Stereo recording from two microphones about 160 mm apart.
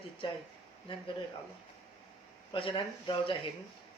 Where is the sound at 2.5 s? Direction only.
35° left (ahead or behind).